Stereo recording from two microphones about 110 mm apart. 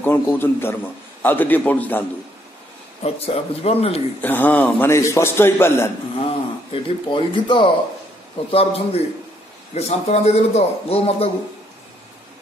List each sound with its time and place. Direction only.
0.0 s a man's voice: 20° left (ahead or behind)
3.0 s a man's voice: 70° left (ahead or behind)
4.2 s a man's voice: 15° left (ahead or behind)
6.1 s speech: 55° left (ahead or behind)
8.5 s a man's voice: 60° left (ahead or behind)
9.8 s a man's voice: 85° left